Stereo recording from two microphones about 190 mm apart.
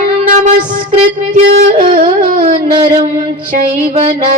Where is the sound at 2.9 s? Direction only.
30° right (ahead or behind).